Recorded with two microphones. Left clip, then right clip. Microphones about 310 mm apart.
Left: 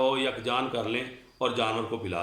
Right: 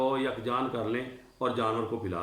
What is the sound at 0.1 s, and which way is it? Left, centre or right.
Speech, centre.